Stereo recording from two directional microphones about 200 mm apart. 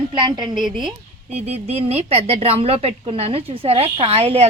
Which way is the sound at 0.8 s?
5° right (ahead or behind).